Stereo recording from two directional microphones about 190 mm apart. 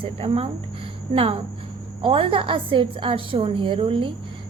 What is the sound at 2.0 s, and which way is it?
A woman's voice, 25° right (ahead or behind).